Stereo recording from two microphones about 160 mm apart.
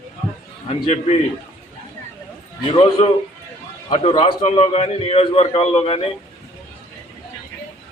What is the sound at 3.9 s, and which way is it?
A man's voice, 35° left (ahead or behind).